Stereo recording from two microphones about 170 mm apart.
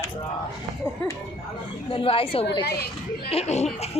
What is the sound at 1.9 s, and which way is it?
Speech, 30° left (ahead or behind).